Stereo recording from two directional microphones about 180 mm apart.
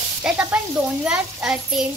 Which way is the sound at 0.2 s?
10° right (ahead or behind).